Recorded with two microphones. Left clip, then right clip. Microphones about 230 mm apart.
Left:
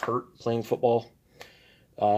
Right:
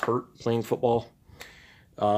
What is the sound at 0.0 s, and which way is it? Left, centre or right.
Speech, right.